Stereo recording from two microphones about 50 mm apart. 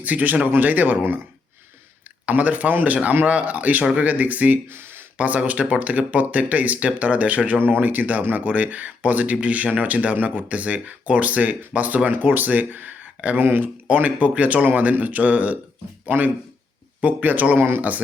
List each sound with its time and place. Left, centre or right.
0.0 s speech: right
2.2 s speech: right
4.7 s a sound: right
5.1 s speech: right
13.8 s speech: right
17.6 s speech: right